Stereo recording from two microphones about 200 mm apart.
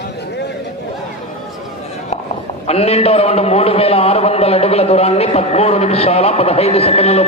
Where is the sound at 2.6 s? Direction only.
30° left (ahead or behind).